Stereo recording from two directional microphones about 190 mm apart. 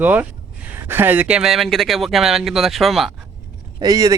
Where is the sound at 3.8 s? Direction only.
20° right (ahead or behind).